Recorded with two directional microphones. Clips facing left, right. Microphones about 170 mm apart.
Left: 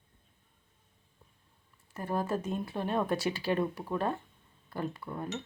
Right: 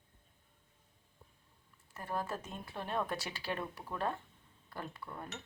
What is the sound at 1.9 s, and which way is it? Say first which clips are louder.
Speech: left 7 dB; 20° left (ahead or behind).